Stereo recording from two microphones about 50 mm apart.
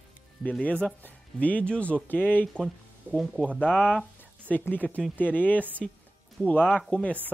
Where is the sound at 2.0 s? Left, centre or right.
Left.